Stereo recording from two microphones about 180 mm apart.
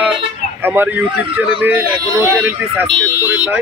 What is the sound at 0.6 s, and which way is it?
Speech, 10° right (ahead or behind).